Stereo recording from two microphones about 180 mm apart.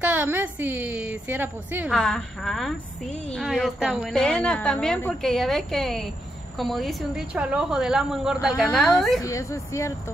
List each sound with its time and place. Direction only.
0.0 s a woman's voice: 10° right (ahead or behind)
1.9 s a woman's voice: 5° left (ahead or behind)
9.2 s speech: 15° left (ahead or behind)